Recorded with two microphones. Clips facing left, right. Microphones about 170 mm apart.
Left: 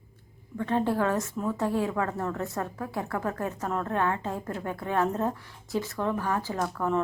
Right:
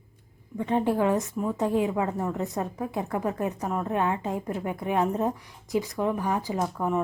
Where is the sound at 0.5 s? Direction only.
15° right (ahead or behind).